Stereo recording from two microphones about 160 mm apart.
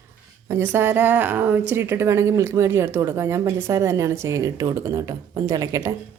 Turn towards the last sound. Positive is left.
turn(degrees=-20)  # may be behind; listen again after turning